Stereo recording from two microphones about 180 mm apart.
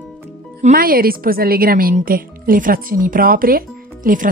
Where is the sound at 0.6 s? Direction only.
50° right (ahead or behind).